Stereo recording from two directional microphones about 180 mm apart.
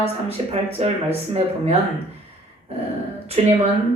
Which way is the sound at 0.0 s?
35° right (ahead or behind).